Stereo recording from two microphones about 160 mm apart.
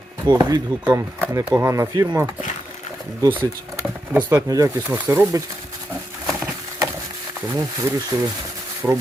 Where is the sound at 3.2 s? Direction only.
30° right (ahead or behind).